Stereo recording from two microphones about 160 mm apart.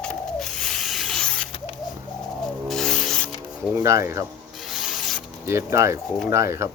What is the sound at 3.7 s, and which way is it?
Speech, 15° right (ahead or behind).